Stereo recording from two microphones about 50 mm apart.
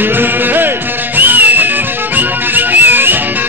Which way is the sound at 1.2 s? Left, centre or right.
Right.